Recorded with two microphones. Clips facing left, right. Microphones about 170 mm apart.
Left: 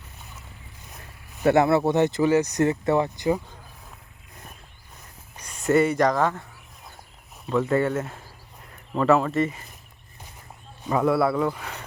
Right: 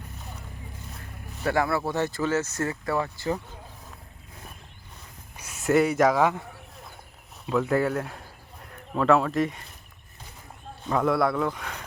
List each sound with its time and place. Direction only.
1.5 s speech: 25° left (ahead or behind)
5.4 s speech: 5° right (ahead or behind)
7.5 s speech: centre (ahead or behind)
10.8 s speech: 5° left (ahead or behind)